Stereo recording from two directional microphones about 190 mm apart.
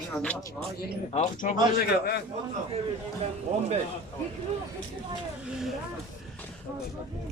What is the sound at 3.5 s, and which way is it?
Speech, 35° right (ahead or behind).